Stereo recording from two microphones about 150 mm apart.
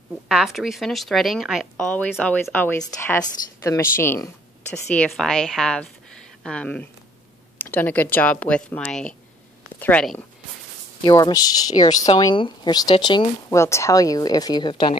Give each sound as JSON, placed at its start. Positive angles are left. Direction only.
{"t": 0.3, "sound": "a woman's voice", "side_deg": 0}
{"t": 4.9, "sound": "a woman's voice", "side_deg": 5}
{"t": 11.1, "sound": "speech", "side_deg": 30}
{"t": 13.6, "sound": "speech", "side_deg": 20}